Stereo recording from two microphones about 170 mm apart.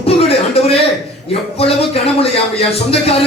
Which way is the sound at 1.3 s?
35° left (ahead or behind).